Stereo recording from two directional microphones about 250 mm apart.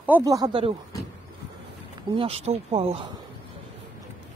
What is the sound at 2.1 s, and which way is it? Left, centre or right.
Speech, right.